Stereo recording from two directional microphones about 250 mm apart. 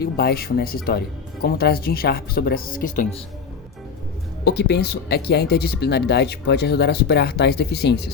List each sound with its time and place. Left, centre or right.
0.0 s speech: left
4.4 s speech: left